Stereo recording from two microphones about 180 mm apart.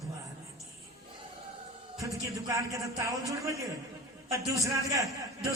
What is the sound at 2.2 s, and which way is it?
A man's voice, 20° right (ahead or behind).